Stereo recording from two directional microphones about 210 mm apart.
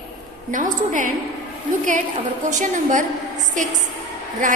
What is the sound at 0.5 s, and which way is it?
Speech, 40° right (ahead or behind).